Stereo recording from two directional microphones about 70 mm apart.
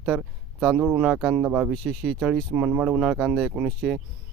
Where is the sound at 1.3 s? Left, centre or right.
Centre.